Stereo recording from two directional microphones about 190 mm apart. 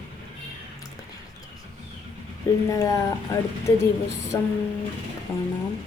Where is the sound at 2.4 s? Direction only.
20° left (ahead or behind).